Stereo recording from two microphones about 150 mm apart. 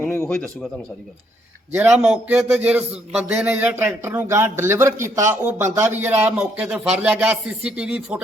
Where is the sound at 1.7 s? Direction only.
10° right (ahead or behind).